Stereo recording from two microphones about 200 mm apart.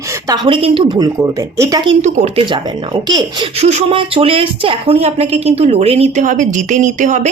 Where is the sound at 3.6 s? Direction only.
30° right (ahead or behind).